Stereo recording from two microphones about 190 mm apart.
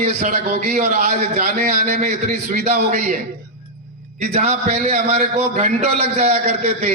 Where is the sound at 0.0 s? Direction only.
40° right (ahead or behind).